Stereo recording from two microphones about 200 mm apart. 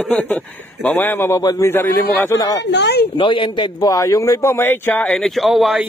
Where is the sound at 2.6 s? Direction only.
60° left (ahead or behind).